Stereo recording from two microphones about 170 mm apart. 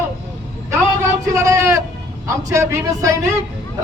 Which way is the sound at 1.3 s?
15° right (ahead or behind).